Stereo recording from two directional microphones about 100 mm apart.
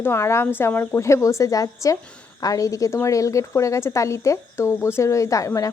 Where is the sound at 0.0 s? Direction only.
25° left (ahead or behind).